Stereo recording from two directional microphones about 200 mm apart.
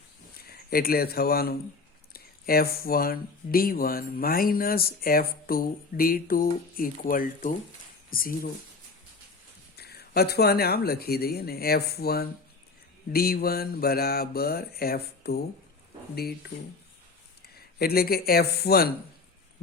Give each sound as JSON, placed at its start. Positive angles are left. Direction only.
{"t": 0.3, "sound": "speech", "side_deg": 50}
{"t": 9.7, "sound": "speech", "side_deg": 50}
{"t": 17.5, "sound": "speech", "side_deg": 50}